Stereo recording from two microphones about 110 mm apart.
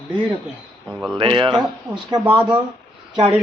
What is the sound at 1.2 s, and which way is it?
Speech, 50° right (ahead or behind).